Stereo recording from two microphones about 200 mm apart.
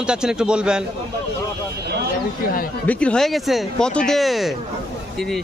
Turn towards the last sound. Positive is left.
turn(degrees=0)  # may be behind; listen again after turning